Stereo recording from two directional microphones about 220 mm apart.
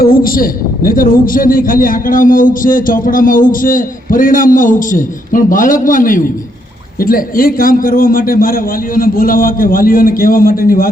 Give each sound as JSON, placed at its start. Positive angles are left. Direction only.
{"t": 0.0, "sound": "a man's voice", "side_deg": 40}